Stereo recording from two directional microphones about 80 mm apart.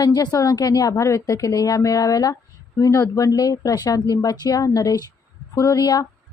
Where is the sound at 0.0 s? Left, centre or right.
Left.